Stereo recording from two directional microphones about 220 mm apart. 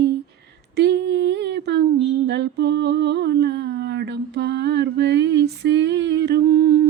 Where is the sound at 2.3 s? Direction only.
50° right (ahead or behind).